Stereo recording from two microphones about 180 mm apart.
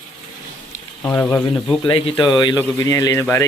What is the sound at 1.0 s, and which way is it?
Speech, 10° left (ahead or behind).